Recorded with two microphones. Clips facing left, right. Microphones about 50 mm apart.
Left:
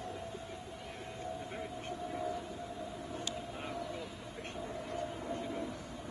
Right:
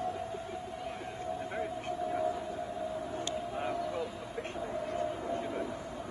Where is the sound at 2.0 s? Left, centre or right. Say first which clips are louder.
Right 6 dB; centre.